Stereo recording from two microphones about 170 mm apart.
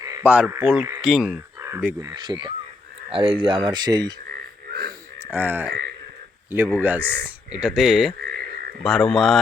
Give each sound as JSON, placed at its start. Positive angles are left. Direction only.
{"t": 0.0, "sound": "a sound", "side_deg": -20}
{"t": 0.3, "sound": "speech", "side_deg": -10}
{"t": 4.7, "sound": "speech", "side_deg": -65}
{"t": 5.3, "sound": "speech", "side_deg": -10}